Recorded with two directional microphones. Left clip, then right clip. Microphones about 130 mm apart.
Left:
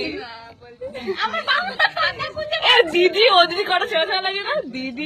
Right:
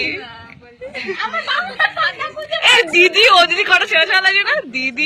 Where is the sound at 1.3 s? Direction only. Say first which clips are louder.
Right 1 dB; 25° left (ahead or behind).